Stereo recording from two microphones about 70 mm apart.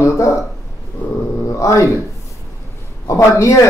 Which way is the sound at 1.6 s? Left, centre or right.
Left.